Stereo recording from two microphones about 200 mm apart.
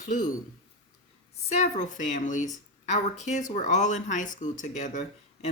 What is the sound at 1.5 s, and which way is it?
Speech, 35° left (ahead or behind).